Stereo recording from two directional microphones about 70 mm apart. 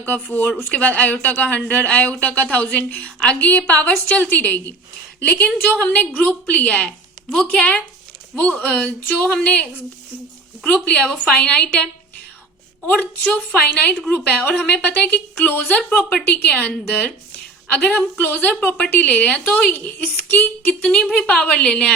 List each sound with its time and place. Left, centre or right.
0.0 s a woman's voice: left
10.8 s a woman's voice: centre
13.3 s a woman's voice: centre
18.2 s a woman's voice: left
19.7 s a woman's voice: left
20.8 s a woman's voice: centre